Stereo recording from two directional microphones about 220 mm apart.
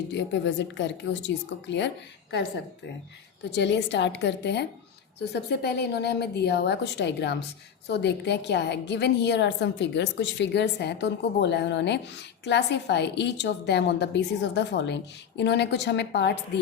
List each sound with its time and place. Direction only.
0.1 s a woman's voice: 50° left (ahead or behind)
3.5 s a woman's voice: 55° left (ahead or behind)